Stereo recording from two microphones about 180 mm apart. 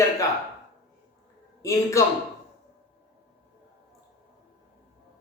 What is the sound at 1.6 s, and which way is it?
Speech, 15° left (ahead or behind).